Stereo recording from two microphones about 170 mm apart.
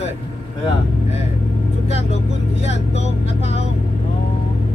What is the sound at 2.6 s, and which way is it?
Speech, 40° left (ahead or behind).